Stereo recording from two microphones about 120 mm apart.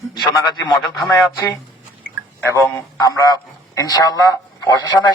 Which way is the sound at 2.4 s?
25° left (ahead or behind).